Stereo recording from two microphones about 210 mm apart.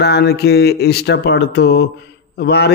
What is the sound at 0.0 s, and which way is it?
Speech, 50° left (ahead or behind).